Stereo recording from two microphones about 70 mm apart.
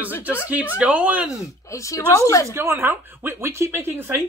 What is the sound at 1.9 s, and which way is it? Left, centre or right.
Speech, left.